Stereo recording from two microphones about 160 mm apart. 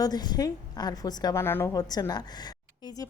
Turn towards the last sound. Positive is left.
turn(degrees=25)  # may be behind; listen again after turning